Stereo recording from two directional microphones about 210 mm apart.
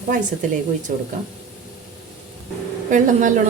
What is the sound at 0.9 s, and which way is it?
Speech, 40° right (ahead or behind).